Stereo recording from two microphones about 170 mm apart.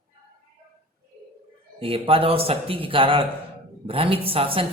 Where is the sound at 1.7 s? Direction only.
30° right (ahead or behind).